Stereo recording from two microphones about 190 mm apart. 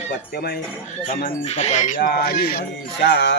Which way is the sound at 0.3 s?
55° left (ahead or behind).